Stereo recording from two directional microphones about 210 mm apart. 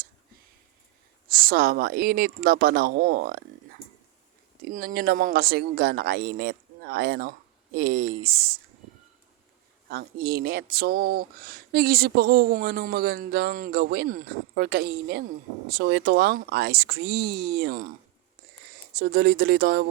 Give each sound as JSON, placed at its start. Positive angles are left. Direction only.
{"t": 1.3, "sound": "speech", "side_deg": -45}
{"t": 4.7, "sound": "speech", "side_deg": -40}
{"t": 9.9, "sound": "speech", "side_deg": -50}
{"t": 18.9, "sound": "speech", "side_deg": -50}